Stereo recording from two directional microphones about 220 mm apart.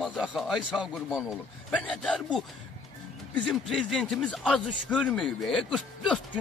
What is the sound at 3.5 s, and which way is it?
Speech, centre (ahead or behind).